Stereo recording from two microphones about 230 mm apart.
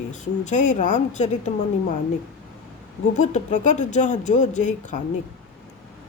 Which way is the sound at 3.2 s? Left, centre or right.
Left.